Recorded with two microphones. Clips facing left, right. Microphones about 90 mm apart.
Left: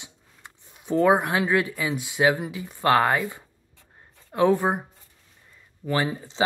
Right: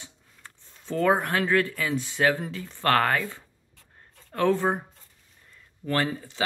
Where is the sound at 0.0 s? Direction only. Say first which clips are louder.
Left 1 dB; 15° left (ahead or behind).